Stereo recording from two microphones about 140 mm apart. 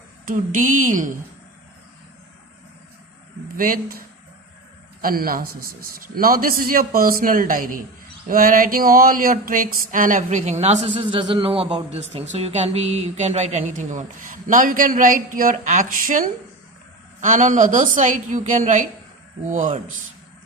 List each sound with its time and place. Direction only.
0.3 s speech: 70° right (ahead or behind)
3.6 s a man's voice: 90° right; by 10.8 s 55° right (ahead or behind)
11.1 s speech: 40° right (ahead or behind)
12.3 s a woman's voice: 55° right (ahead or behind)